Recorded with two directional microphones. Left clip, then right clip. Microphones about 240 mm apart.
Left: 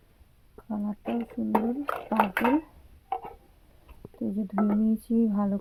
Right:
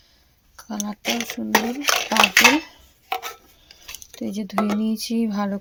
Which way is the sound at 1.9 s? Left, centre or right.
Right.